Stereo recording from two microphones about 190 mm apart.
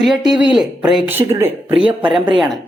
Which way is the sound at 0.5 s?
5° right (ahead or behind).